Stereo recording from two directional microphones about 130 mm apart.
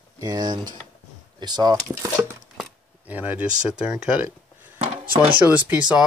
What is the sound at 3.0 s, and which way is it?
Speech, 10° right (ahead or behind).